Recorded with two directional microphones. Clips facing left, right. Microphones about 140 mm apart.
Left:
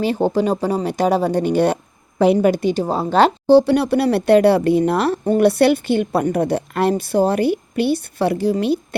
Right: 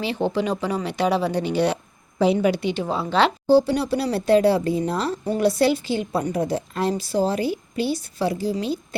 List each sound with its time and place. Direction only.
0.0 s speech: 45° left (ahead or behind)
3.4 s speech: 65° left (ahead or behind)